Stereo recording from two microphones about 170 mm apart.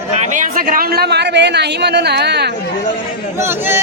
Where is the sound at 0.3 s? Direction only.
50° right (ahead or behind); by 2.5 s 75° right (ahead or behind).